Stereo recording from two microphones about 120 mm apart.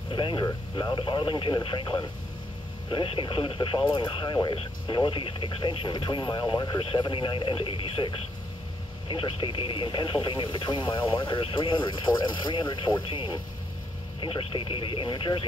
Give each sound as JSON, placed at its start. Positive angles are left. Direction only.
{"t": 0.1, "sound": "speech", "side_deg": 45}